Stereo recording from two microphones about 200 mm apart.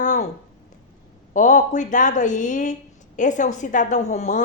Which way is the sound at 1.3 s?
40° left (ahead or behind).